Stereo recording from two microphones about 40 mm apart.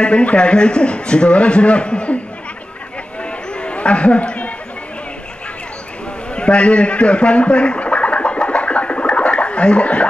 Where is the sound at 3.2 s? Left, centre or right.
Left.